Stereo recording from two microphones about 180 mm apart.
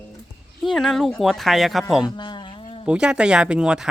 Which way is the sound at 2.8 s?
5° right (ahead or behind).